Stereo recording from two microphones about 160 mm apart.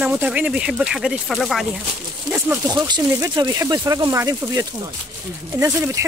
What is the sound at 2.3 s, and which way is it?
Speech, 15° right (ahead or behind).